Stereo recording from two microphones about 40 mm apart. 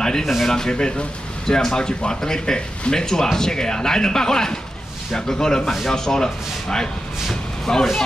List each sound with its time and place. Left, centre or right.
0.0 s speech: centre